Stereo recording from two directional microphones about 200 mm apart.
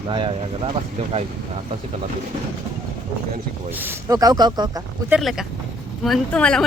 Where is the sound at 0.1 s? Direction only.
25° right (ahead or behind).